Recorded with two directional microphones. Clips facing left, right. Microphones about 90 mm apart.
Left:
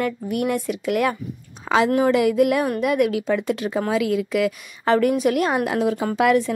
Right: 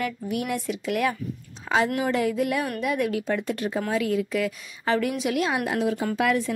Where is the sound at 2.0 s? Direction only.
90° left; by 2.7 s 65° left (ahead or behind).